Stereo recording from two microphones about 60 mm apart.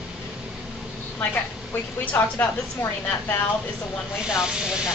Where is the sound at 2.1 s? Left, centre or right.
Left.